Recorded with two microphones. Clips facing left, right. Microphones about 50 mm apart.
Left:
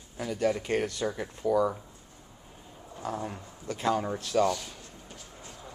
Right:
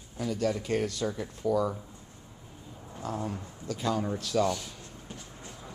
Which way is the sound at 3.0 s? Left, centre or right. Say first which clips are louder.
Even; centre.